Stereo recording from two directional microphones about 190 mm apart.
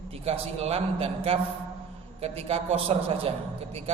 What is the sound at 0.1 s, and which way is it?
A man's voice, 30° right (ahead or behind).